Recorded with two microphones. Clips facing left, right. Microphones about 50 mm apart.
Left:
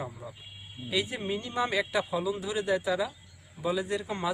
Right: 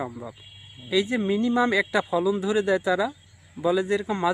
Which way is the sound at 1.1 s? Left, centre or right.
Right.